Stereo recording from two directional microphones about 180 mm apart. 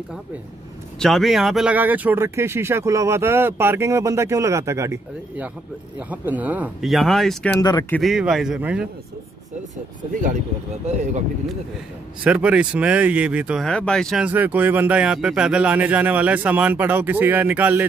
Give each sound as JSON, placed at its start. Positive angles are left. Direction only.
{"t": 0.9, "sound": "speech", "side_deg": 0}
{"t": 5.9, "sound": "speech", "side_deg": -10}
{"t": 10.9, "sound": "speech", "side_deg": -40}
{"t": 12.2, "sound": "speech", "side_deg": -5}
{"t": 13.7, "sound": "speech", "side_deg": 5}
{"t": 14.2, "sound": "speech", "side_deg": -10}